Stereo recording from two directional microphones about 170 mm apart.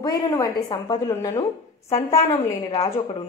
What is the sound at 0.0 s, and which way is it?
A woman's voice, 20° left (ahead or behind).